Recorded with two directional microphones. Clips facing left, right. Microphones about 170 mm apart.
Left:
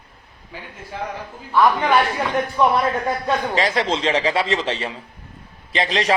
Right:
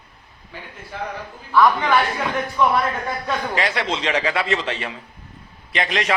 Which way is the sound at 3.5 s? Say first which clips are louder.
Left 3 dB; 30° left (ahead or behind).